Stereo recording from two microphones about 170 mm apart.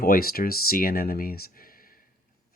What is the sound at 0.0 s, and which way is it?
Speech, 60° left (ahead or behind).